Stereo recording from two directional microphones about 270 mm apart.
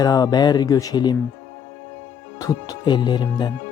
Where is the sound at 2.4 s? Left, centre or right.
Centre.